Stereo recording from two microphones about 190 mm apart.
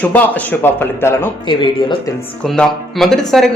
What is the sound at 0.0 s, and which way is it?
Speech, 10° left (ahead or behind).